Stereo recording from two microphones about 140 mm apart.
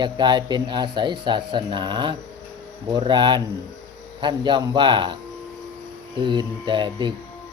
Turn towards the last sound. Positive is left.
turn(degrees=-35)  # may be behind; listen again after turning